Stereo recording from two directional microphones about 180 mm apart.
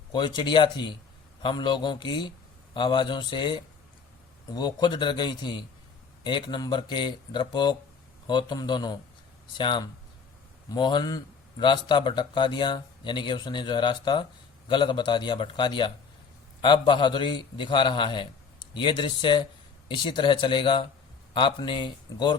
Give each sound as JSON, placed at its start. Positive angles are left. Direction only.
{"t": 0.1, "sound": "speech", "side_deg": 25}